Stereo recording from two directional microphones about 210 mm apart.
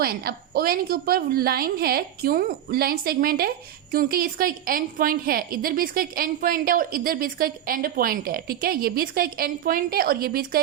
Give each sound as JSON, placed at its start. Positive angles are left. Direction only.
{"t": 0.0, "sound": "a woman's voice", "side_deg": -45}